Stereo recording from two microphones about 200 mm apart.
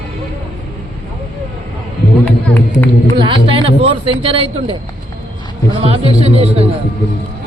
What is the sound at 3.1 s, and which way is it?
Speech, 25° right (ahead or behind).